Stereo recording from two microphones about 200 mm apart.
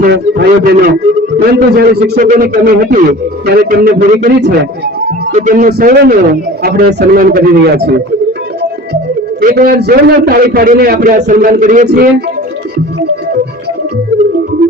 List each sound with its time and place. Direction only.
0.0 s a man's voice: 50° right (ahead or behind)
5.3 s a man's voice: 40° right (ahead or behind)
9.4 s a man's voice: 45° right (ahead or behind)